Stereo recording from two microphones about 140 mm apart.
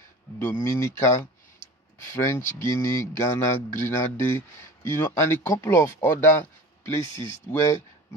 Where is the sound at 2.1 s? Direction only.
20° left (ahead or behind).